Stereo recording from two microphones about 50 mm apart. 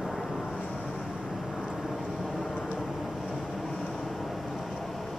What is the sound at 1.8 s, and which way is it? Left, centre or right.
Vehicle, centre.